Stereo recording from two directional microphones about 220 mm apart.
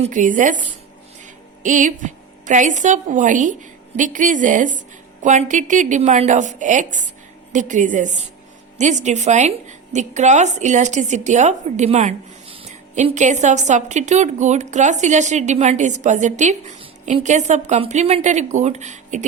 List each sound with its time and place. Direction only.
0.0 s a woman's voice: 35° right (ahead or behind)